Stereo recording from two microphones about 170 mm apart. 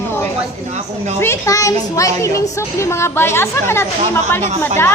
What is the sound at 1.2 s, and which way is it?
A woman's voice, 15° left (ahead or behind).